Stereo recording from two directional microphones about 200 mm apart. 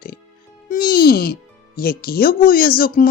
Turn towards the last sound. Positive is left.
turn(degrees=45)  # may be behind; listen again after turning